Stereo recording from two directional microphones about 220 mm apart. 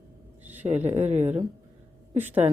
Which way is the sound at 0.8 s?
10° right (ahead or behind).